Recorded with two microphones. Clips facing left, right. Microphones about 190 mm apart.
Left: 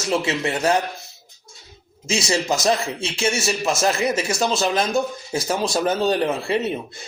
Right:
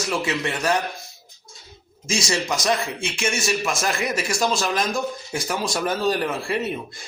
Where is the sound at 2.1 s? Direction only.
25° left (ahead or behind).